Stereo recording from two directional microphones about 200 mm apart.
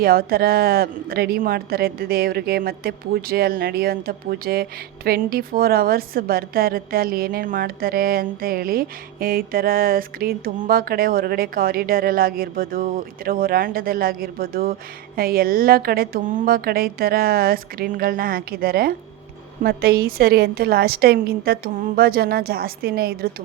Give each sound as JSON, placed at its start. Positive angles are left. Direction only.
{"t": 0.0, "sound": "a woman's voice", "side_deg": -50}